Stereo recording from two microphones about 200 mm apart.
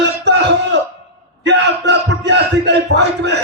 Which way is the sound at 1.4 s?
60° right (ahead or behind).